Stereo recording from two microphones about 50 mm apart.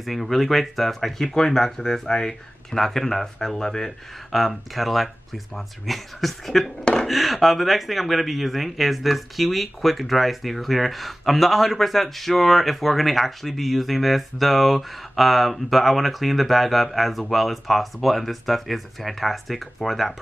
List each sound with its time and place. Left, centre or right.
0.0 s speech: centre
6.8 s speech: centre
7.1 s speech: centre